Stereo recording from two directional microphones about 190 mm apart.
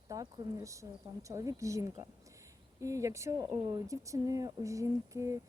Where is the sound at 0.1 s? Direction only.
15° right (ahead or behind).